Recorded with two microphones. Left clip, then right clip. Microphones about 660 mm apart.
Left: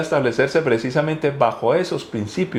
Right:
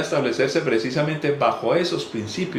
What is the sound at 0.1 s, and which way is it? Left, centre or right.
Speech, left.